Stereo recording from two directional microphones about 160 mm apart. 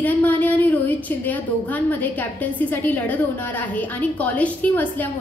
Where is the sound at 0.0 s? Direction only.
10° left (ahead or behind).